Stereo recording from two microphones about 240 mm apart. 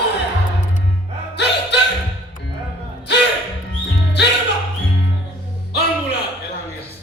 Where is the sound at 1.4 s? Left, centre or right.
Left.